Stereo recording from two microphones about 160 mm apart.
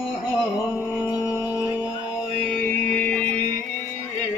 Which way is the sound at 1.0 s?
20° left (ahead or behind).